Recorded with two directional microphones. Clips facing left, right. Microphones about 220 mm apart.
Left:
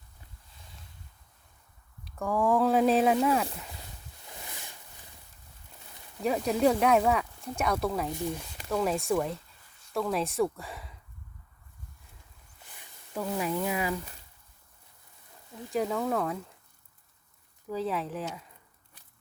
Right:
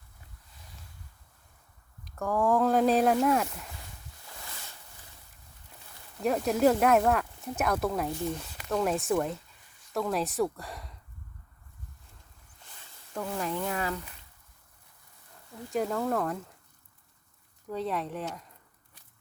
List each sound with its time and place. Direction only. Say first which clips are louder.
2.1 s speech: even; centre (ahead or behind)
4.3 s a sound: left 2 dB; 20° left (ahead or behind)
6.1 s speech: right 1 dB; centre (ahead or behind)
12.7 s speech: left 1 dB; 10° left (ahead or behind)
15.7 s speech: even; centre (ahead or behind)
17.7 s speech: left 1 dB; centre (ahead or behind)